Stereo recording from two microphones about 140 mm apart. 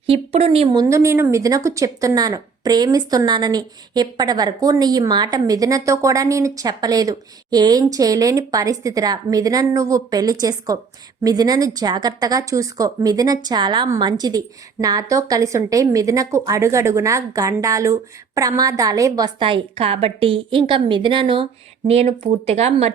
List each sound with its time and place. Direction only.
0.1 s speech: 45° right (ahead or behind)
0.7 s a woman's voice: 25° right (ahead or behind); by 22.9 s 50° right (ahead or behind)